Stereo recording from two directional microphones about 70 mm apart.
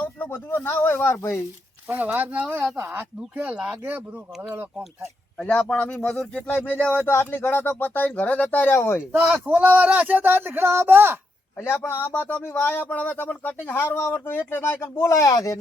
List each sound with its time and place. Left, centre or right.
0.0 s speech: left
1.1 s speech: left
1.9 s speech: right
3.3 s speech: centre
5.4 s speech: centre
6.5 s speech: left
7.0 s speech: left
9.1 s speech: centre
11.5 s speech: left